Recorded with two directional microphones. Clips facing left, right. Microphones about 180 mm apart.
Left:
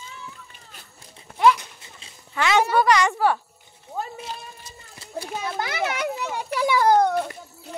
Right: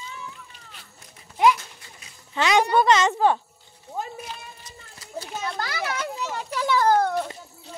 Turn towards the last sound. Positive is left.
turn(degrees=10)  # may be behind; listen again after turning